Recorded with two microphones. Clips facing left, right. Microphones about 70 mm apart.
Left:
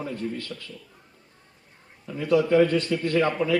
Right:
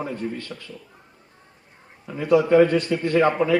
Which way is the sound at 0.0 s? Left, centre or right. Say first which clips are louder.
Right 2 dB; right.